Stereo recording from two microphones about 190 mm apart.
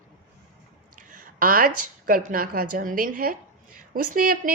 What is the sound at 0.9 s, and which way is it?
A woman's voice, 45° right (ahead or behind).